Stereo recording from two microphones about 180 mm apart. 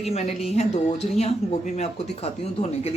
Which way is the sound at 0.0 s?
35° left (ahead or behind).